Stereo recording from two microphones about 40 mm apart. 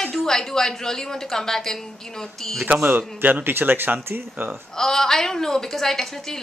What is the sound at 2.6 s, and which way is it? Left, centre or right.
Speech, right.